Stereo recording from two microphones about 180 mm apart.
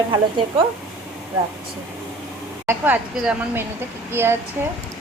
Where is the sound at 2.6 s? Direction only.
10° right (ahead or behind).